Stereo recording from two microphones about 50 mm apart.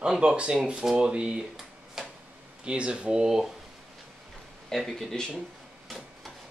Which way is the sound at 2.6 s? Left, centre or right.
Right.